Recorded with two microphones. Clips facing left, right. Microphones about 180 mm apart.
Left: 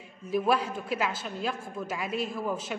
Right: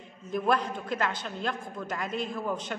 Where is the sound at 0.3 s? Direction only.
5° left (ahead or behind).